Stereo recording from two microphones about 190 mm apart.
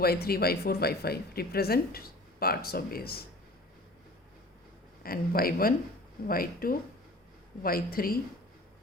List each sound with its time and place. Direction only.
0.0 s speech: 55° left (ahead or behind)
5.0 s speech: 50° left (ahead or behind)